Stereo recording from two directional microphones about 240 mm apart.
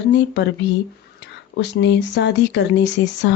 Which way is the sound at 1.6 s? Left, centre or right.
Left.